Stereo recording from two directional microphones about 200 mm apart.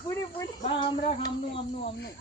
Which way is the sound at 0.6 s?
30° left (ahead or behind).